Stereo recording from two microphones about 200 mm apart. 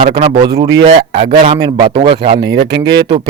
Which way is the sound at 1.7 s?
25° right (ahead or behind).